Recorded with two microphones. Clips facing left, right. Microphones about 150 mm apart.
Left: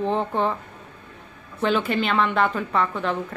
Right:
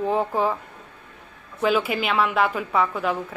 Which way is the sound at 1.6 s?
5° right (ahead or behind).